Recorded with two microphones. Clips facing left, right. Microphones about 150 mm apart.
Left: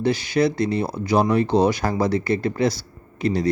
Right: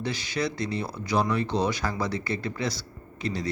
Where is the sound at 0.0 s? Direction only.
60° left (ahead or behind).